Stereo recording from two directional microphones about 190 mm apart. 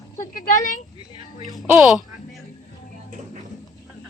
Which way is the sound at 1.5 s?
Centre (ahead or behind).